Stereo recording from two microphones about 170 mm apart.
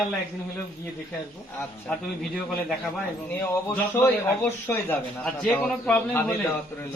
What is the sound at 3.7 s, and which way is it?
A man's voice, 10° left (ahead or behind).